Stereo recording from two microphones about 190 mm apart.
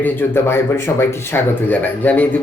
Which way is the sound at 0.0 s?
10° left (ahead or behind).